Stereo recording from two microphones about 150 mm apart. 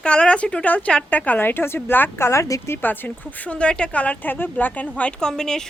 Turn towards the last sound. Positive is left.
turn(degrees=5)  # may be behind; listen again after turning